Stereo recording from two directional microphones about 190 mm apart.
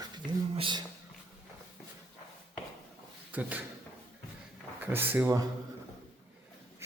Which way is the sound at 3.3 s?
10° right (ahead or behind).